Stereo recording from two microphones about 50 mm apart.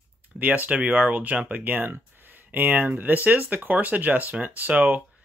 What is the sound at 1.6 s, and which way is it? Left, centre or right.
Speech, right.